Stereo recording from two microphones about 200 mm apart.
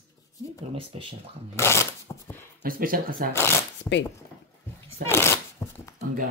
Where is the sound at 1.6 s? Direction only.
15° left (ahead or behind).